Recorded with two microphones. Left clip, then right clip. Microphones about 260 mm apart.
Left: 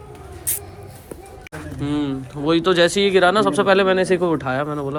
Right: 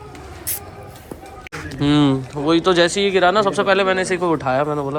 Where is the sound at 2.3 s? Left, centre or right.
Centre.